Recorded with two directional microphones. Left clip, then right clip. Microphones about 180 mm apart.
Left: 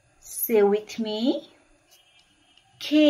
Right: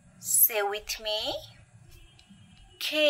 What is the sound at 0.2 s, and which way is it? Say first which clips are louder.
Speech: left 8 dB; 40° right (ahead or behind).